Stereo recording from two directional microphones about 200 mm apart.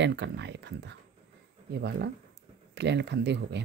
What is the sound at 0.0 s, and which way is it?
Speech, 60° right (ahead or behind).